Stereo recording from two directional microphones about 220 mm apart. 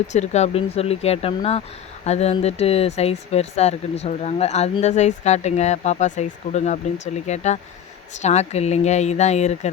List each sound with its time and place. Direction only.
0.1 s speech: 30° left (ahead or behind)